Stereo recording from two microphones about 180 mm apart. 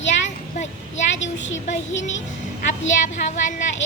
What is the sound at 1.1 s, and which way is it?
Speech, 90° left.